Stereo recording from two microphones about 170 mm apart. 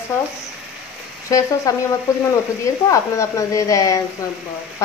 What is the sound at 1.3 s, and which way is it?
Speech, 20° left (ahead or behind).